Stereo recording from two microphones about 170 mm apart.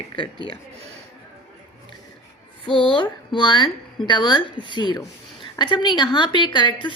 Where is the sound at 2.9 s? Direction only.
30° left (ahead or behind).